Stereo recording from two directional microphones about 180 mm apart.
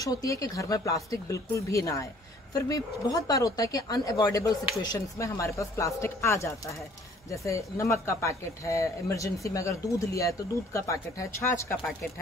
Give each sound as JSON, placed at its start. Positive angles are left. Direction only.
{"t": 0.0, "sound": "speech", "side_deg": 20}